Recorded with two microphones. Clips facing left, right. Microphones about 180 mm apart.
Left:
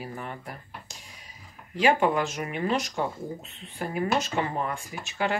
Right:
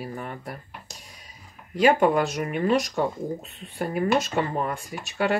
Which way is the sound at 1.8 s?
45° right (ahead or behind).